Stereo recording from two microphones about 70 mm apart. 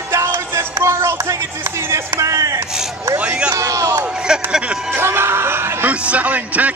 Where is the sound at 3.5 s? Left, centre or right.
Right.